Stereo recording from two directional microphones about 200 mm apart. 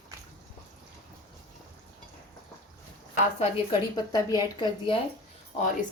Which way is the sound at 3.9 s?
20° left (ahead or behind).